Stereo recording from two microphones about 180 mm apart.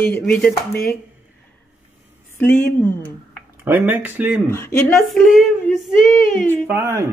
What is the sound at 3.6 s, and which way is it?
Speech, 10° right (ahead or behind).